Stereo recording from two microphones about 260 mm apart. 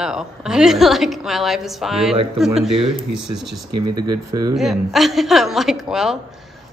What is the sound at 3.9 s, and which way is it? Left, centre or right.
Speech, right.